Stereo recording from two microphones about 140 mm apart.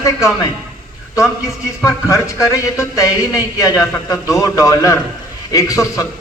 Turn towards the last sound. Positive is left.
turn(degrees=25)  # may be behind; listen again after turning